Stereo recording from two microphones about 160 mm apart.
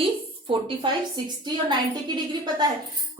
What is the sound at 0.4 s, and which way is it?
A woman's voice, 30° right (ahead or behind).